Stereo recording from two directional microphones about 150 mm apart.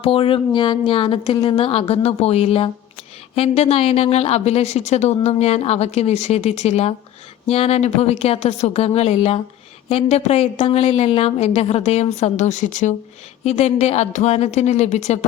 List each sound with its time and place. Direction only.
0.0 s a woman's voice: 35° left (ahead or behind)